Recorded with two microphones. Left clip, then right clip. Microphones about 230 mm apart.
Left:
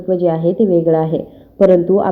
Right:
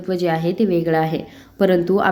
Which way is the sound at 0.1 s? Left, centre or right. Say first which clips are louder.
Left 5 dB; centre.